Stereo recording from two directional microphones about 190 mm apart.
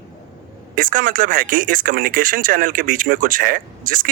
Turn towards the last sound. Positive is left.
turn(degrees=-45)  # may be behind; listen again after turning